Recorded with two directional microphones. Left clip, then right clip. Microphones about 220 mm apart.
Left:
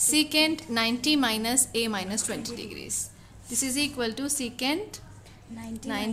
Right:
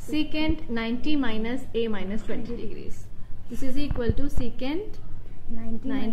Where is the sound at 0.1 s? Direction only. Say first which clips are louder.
Left 3 dB; 50° left (ahead or behind).